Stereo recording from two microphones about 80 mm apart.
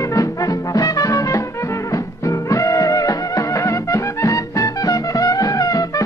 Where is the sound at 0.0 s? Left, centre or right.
Left.